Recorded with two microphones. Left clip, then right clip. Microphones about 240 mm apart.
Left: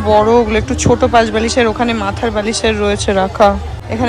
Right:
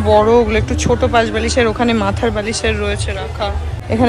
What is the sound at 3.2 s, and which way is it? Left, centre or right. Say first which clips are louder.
Speech: left 11 dB; left.